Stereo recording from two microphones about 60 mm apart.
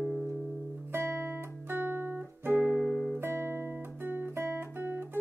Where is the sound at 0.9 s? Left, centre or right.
Right.